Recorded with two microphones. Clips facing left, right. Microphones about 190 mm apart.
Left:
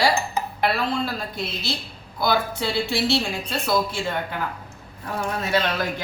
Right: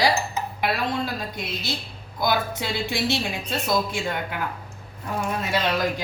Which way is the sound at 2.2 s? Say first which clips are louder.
Left 1 dB; 20° right (ahead or behind).